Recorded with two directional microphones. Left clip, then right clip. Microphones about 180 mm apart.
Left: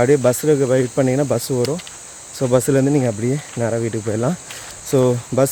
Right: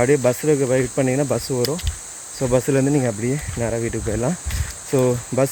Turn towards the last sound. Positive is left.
turn(degrees=15)  # may be behind; listen again after turning